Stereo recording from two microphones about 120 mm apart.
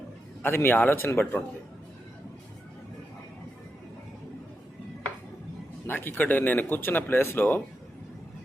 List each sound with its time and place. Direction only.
0.4 s speech: 20° left (ahead or behind)
5.9 s speech: 15° left (ahead or behind)